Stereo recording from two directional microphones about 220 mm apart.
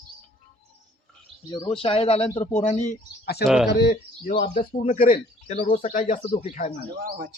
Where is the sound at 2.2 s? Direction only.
15° left (ahead or behind).